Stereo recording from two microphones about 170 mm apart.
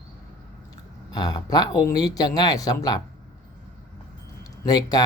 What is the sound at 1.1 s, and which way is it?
Speech, 25° left (ahead or behind).